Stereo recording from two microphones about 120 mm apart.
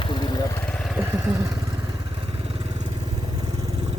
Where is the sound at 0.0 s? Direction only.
40° left (ahead or behind).